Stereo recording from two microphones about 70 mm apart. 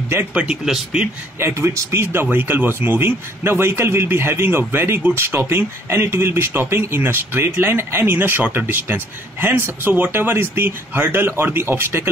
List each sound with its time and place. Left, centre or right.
0.3 s speech: centre
1.4 s a man's voice: right